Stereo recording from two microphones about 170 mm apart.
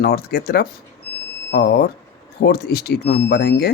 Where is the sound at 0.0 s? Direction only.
65° left (ahead or behind).